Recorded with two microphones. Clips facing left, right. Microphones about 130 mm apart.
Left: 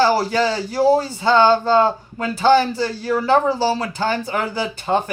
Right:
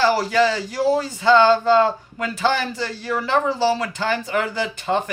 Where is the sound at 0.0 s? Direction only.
35° left (ahead or behind).